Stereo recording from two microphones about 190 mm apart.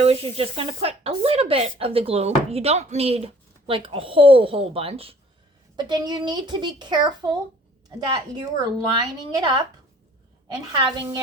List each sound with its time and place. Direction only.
0.0 s speech: 30° right (ahead or behind)
8.4 s speech: 20° right (ahead or behind)
10.9 s speech: 20° right (ahead or behind)